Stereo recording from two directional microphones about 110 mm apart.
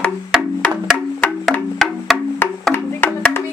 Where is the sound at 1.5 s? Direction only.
5° left (ahead or behind).